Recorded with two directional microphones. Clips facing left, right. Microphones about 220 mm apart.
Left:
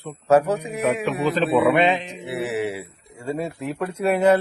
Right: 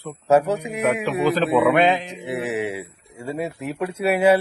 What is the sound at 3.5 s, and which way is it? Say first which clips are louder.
Speech: left 1 dB; 30° left (ahead or behind).